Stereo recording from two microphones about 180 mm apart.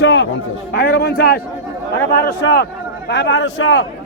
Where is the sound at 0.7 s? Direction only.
60° left (ahead or behind).